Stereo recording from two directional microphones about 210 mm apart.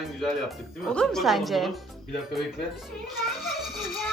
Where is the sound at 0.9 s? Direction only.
Centre (ahead or behind).